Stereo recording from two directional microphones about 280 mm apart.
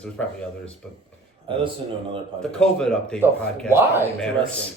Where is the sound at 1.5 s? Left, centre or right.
Centre.